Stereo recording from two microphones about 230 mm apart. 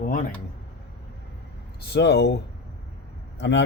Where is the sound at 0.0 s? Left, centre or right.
Left.